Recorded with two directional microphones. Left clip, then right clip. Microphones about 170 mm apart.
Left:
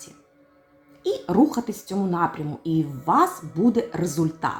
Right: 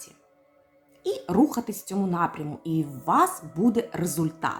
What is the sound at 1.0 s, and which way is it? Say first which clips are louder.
A woman's voice: left 3 dB; 10° right (ahead or behind).